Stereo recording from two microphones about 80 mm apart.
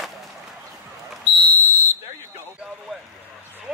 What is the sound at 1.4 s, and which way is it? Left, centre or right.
Fire alarm, left.